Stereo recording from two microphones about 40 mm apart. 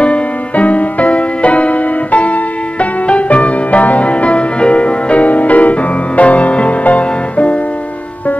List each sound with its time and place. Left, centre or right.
0.0 s music: left